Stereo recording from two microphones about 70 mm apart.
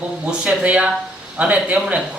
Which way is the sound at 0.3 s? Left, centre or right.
Centre.